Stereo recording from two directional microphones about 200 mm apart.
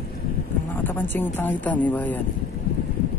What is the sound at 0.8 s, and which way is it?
Speech, 10° left (ahead or behind).